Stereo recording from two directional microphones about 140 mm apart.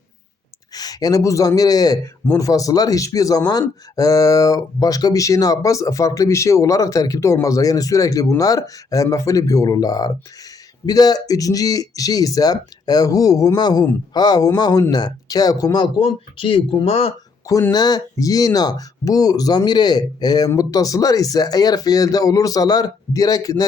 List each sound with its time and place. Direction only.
0.7 s speech: 25° left (ahead or behind); by 17.1 s 45° left (ahead or behind)
17.4 s speech: 25° left (ahead or behind)